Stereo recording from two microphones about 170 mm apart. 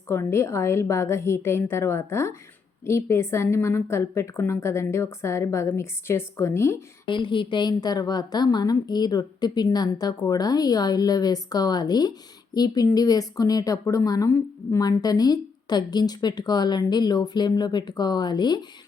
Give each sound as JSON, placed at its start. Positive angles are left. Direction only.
{"t": 0.1, "sound": "a woman's voice", "side_deg": 15}
{"t": 7.1, "sound": "speech", "side_deg": 30}